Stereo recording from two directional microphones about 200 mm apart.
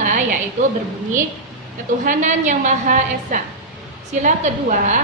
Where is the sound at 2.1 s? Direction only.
40° right (ahead or behind).